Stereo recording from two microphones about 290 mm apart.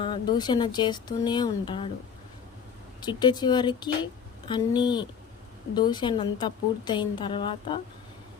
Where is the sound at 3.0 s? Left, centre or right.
Centre.